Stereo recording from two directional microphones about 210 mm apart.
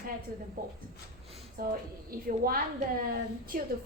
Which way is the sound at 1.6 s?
45° right (ahead or behind).